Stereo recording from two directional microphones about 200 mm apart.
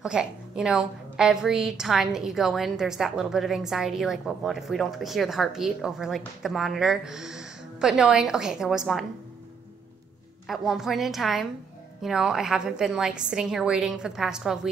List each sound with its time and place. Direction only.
0.0 s a woman's voice: 5° right (ahead or behind)
10.4 s a woman's voice: centre (ahead or behind)